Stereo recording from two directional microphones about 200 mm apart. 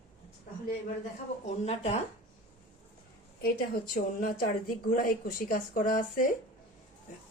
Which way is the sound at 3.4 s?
50° left (ahead or behind).